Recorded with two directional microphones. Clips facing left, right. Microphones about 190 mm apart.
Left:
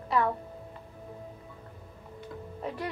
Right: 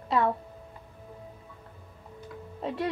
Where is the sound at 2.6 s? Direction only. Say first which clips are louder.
Right 5 dB; 25° right (ahead or behind).